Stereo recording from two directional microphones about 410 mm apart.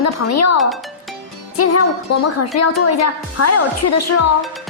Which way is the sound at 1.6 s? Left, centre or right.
Left.